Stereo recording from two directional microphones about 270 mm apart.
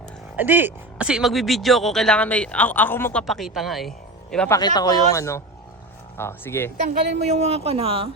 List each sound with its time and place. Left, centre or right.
0.3 s speech: centre
7.2 s speech: right